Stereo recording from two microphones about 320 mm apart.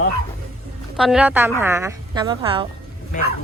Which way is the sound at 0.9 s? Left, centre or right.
Centre.